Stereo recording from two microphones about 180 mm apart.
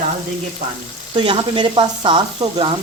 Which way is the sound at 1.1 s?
30° right (ahead or behind).